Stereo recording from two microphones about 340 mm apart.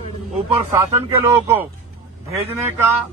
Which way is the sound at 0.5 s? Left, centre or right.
Centre.